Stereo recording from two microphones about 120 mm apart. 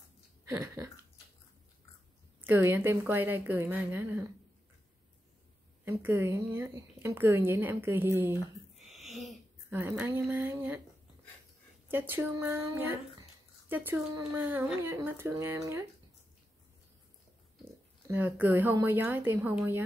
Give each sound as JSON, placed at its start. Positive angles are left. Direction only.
{"t": 2.4, "sound": "a woman's voice", "side_deg": -15}
{"t": 5.9, "sound": "a woman's voice", "side_deg": -15}
{"t": 8.7, "sound": "a sound", "side_deg": 0}
{"t": 9.7, "sound": "a woman's voice", "side_deg": -15}
{"t": 11.9, "sound": "a woman's voice", "side_deg": -15}
{"t": 18.0, "sound": "a woman's voice", "side_deg": -15}